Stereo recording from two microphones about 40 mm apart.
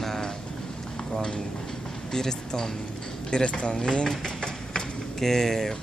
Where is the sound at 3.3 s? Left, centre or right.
Left.